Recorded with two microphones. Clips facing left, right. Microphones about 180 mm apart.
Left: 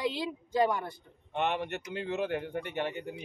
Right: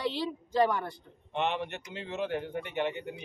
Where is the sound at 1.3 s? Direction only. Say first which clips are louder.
Even; 55° left (ahead or behind).